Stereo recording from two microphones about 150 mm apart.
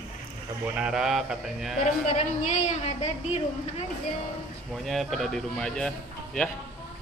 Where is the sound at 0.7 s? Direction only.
5° right (ahead or behind).